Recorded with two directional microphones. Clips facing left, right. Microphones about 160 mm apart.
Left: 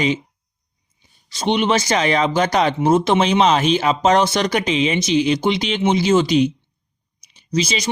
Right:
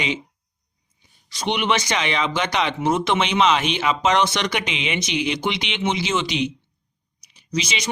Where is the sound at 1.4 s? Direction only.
30° left (ahead or behind).